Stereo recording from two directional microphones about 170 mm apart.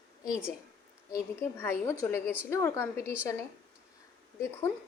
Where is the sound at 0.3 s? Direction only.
15° left (ahead or behind).